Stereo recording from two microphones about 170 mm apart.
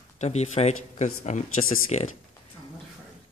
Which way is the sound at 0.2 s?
40° left (ahead or behind).